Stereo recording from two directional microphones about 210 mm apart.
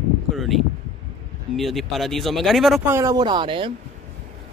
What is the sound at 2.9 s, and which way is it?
Speech, 15° right (ahead or behind).